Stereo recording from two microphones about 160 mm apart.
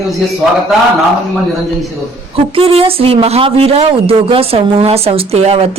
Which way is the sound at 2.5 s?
35° right (ahead or behind).